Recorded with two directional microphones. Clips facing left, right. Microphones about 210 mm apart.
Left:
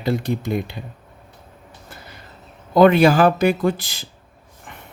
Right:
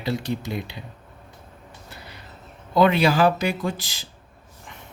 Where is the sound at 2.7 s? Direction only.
50° left (ahead or behind).